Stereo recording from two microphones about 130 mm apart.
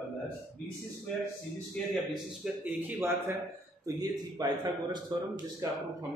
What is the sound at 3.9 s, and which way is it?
A man's voice, 35° right (ahead or behind).